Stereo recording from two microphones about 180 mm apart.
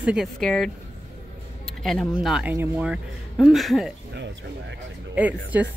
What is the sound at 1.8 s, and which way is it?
A woman's voice, centre (ahead or behind).